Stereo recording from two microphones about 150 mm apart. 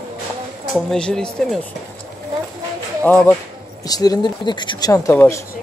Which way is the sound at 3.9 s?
25° left (ahead or behind).